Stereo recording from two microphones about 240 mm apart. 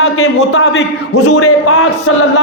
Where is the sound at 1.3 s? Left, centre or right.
Left.